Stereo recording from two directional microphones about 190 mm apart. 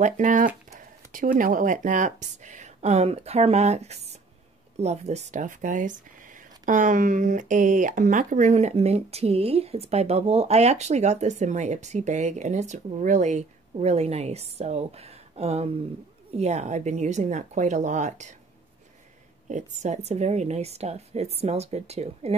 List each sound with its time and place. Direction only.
0.0 s speech: 40° right (ahead or behind)
19.5 s speech: 35° right (ahead or behind)